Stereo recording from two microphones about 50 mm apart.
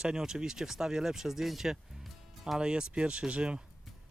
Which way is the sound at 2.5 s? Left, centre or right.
Centre.